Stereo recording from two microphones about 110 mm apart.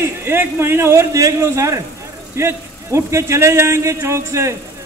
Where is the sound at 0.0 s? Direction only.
20° right (ahead or behind).